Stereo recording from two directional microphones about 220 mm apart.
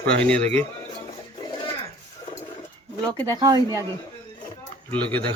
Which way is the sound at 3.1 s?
20° right (ahead or behind).